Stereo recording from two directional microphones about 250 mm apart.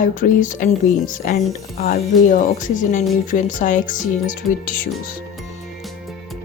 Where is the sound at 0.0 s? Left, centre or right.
Left.